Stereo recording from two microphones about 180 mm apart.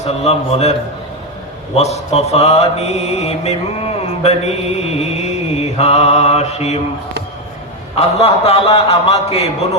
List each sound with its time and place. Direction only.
0.0 s mantra: 35° left (ahead or behind)
7.9 s mantra: 35° left (ahead or behind)